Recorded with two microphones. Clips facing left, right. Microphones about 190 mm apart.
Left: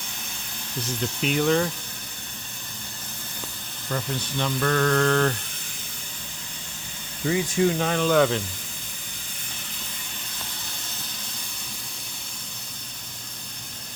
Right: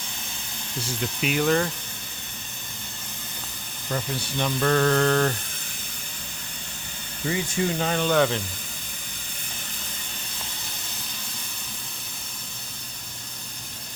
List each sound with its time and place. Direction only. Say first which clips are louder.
0.9 s speech: left 1 dB; 5° right (ahead or behind)
3.8 s speech: even; 15° right (ahead or behind)
7.3 s speech: left 4 dB; centre (ahead or behind)